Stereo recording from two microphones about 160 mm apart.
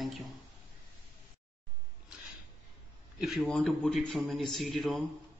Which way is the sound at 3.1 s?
Centre (ahead or behind).